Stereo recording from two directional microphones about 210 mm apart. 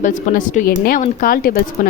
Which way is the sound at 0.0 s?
40° left (ahead or behind).